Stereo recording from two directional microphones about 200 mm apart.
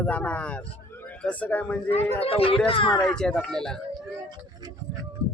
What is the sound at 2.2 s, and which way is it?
Speech, 30° left (ahead or behind).